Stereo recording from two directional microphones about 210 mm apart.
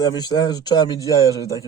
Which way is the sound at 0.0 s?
20° left (ahead or behind).